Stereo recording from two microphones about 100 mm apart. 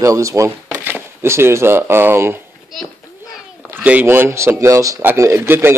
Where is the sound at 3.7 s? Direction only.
15° right (ahead or behind).